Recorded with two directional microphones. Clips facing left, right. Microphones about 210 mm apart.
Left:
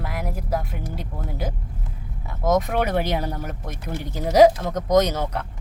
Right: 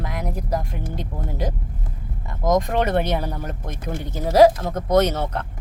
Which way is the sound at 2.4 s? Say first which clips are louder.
Right 1 dB; 5° left (ahead or behind).